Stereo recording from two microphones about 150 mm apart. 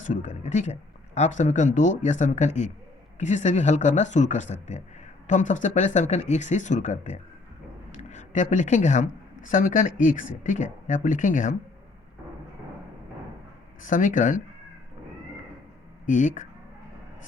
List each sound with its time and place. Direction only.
0.0 s speech: 55° left (ahead or behind)
13.8 s speech: 60° left (ahead or behind)
16.0 s speech: 55° left (ahead or behind)